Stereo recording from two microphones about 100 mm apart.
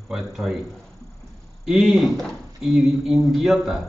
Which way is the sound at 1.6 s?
5° right (ahead or behind).